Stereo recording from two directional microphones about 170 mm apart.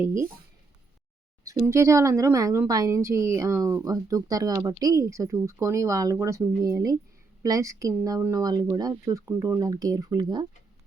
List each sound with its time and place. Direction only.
0.0 s speech: 15° right (ahead or behind)
1.5 s speech: 15° right (ahead or behind)